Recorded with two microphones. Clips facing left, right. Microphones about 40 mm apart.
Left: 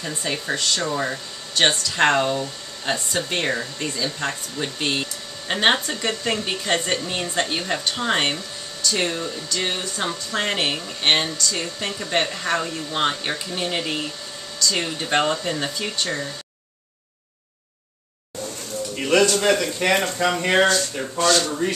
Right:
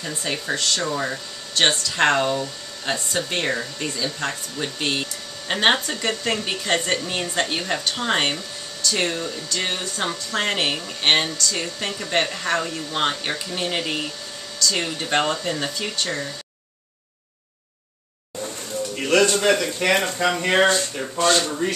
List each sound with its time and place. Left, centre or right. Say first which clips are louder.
0.0 s speech: even; centre
18.9 s a sound: even; centre
19.6 s speech: even; centre
21.2 s speech: even; centre